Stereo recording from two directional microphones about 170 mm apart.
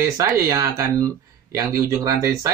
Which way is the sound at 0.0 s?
15° right (ahead or behind).